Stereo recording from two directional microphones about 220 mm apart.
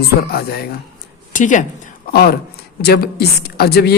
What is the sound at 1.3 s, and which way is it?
A woman's voice, 35° left (ahead or behind).